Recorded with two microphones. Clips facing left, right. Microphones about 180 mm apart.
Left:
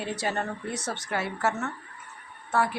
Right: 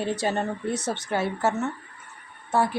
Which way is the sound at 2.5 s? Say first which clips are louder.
Right 3 dB; 25° right (ahead or behind).